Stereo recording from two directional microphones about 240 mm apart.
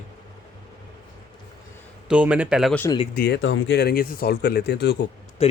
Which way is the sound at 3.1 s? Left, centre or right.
Left.